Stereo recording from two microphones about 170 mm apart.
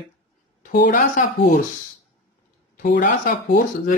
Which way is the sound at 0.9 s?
55° left (ahead or behind).